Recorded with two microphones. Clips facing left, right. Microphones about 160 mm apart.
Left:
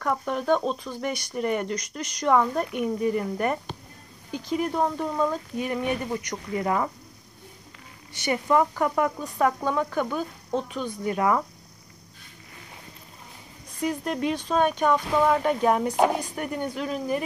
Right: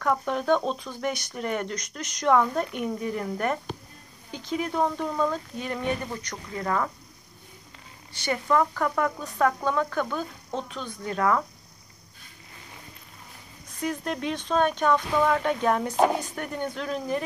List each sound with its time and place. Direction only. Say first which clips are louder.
0.0 s speech: right 1 dB; 5° left (ahead or behind)
8.1 s speech: left 2 dB; 15° left (ahead or behind)
13.8 s speech: left 3 dB; 5° left (ahead or behind)